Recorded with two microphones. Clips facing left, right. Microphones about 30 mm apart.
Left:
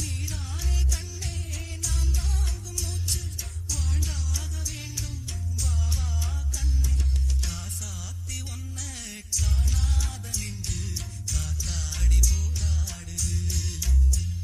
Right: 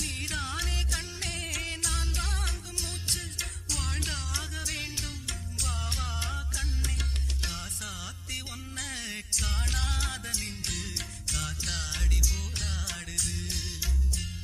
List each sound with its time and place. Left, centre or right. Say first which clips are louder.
0.0 s music: right 3 dB; right
3.3 s music: right 1 dB; right
7.4 s music: right 1 dB; right
8.9 s music: right 3 dB; right
9.3 s music: left 2 dB; right
10.6 s music: right 1 dB; right
12.0 s music: left 2 dB; centre
12.5 s music: even; right